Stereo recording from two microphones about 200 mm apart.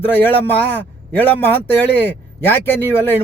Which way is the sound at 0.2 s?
10° left (ahead or behind).